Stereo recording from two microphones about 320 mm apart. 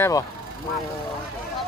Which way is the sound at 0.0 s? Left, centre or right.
Centre.